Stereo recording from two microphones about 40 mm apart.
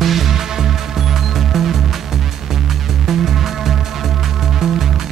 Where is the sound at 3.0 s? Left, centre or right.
Centre.